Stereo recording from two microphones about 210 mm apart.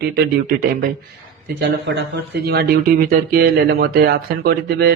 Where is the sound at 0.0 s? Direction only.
45° right (ahead or behind).